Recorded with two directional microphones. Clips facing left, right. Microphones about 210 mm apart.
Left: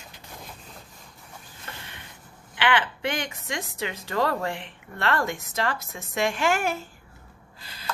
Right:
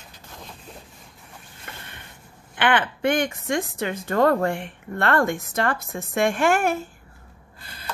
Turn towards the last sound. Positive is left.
turn(degrees=-55)  # may be behind; listen again after turning